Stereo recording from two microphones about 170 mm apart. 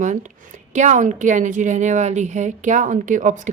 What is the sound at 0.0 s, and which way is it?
A woman's voice, 45° right (ahead or behind).